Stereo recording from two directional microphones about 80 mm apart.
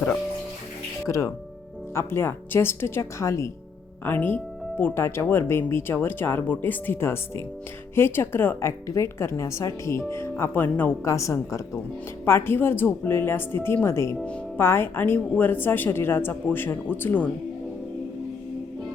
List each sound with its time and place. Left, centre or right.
1.0 s speech: left
2.0 s speech: left
4.0 s speech: left
11.0 s speech: left
12.2 s speech: left
14.3 s speech: centre
14.6 s speech: left